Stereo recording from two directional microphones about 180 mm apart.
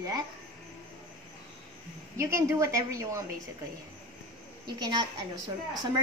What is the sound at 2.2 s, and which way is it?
A woman's voice, 15° right (ahead or behind).